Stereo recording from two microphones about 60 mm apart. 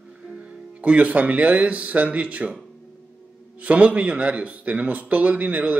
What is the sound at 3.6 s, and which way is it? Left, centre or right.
Speech, right.